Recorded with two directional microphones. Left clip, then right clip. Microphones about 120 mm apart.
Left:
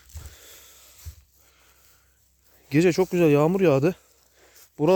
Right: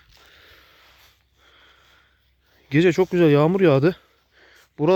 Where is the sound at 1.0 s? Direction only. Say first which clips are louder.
Right 1 dB; 20° right (ahead or behind).